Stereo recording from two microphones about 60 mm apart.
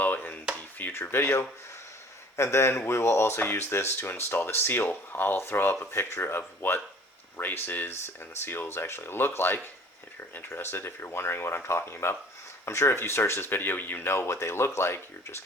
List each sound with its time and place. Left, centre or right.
0.0 s chopping: left
0.8 s speech: left